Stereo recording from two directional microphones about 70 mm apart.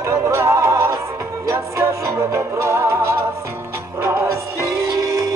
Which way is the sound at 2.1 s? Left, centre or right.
Right.